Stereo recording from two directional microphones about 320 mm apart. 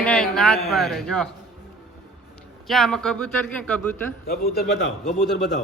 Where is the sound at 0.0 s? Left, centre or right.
Centre.